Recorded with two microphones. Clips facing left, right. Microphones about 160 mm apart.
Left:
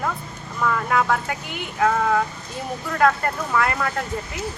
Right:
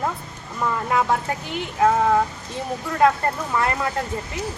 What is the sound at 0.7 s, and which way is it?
Speech, 25° right (ahead or behind).